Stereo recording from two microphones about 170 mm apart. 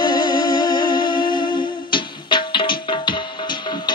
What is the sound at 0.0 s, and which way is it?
Music, 25° left (ahead or behind).